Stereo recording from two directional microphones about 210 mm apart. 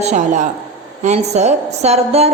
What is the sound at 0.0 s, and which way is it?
A woman's voice, 35° right (ahead or behind).